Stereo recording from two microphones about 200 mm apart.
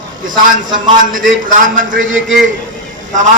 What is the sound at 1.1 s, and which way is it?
Speech, 40° right (ahead or behind).